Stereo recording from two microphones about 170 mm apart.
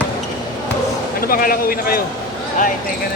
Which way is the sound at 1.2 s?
60° left (ahead or behind).